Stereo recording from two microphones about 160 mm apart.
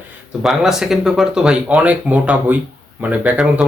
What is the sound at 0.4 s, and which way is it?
Speech, centre (ahead or behind).